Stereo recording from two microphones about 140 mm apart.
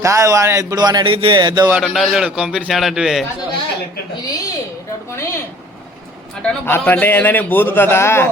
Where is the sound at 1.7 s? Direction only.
Centre (ahead or behind).